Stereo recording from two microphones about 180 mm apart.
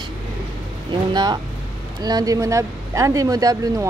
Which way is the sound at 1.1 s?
25° right (ahead or behind).